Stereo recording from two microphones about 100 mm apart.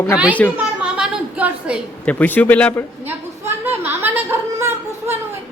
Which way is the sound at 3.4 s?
20° right (ahead or behind).